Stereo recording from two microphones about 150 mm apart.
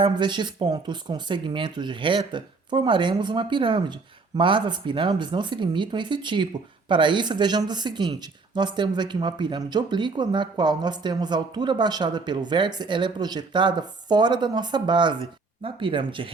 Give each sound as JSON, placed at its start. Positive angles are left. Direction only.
{"t": 0.0, "sound": "speech", "side_deg": -30}